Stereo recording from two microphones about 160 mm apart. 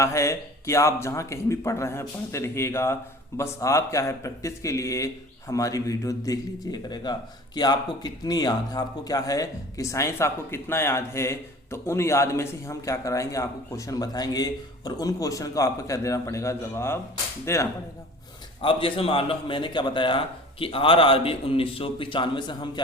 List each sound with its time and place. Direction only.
0.0 s speech: 20° left (ahead or behind)
18.6 s a man's voice: 35° left (ahead or behind)